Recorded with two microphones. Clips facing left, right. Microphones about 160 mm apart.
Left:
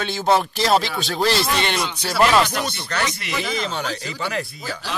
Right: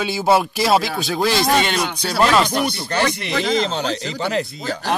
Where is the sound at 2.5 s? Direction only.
30° right (ahead or behind).